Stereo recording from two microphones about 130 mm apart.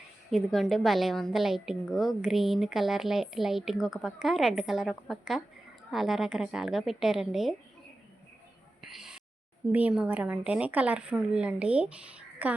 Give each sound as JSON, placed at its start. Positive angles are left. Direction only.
{"t": 0.3, "sound": "a woman's voice", "side_deg": 0}
{"t": 8.8, "sound": "a sound", "side_deg": -5}
{"t": 9.7, "sound": "a woman's voice", "side_deg": -10}